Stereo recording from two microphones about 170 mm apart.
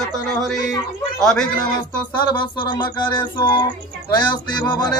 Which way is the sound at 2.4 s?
25° left (ahead or behind).